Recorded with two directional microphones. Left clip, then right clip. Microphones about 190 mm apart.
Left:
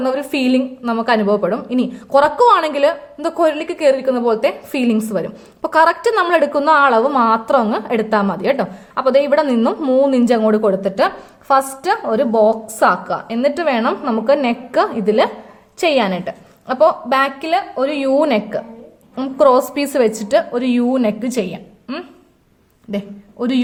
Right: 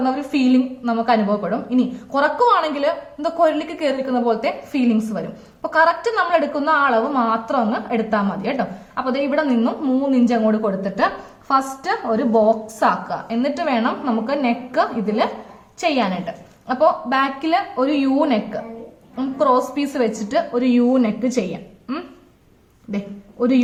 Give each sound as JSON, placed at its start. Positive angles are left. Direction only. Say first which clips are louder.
{"t": 0.0, "sound": "a woman's voice", "louder": "left 2 dB", "side_deg": 45}